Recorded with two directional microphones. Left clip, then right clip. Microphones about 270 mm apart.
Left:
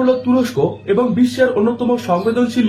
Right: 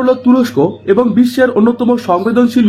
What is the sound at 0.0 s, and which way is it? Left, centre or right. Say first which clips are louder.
Speech: right 4 dB; right.